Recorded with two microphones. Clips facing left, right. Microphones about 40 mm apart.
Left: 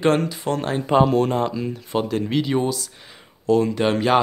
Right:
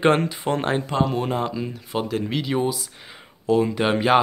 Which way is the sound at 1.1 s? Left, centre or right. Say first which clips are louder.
Left 4 dB; centre.